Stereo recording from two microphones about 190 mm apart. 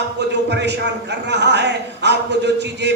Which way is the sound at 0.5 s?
65° right (ahead or behind).